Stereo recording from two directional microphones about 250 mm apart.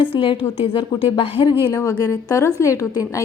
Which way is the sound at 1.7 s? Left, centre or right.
Centre.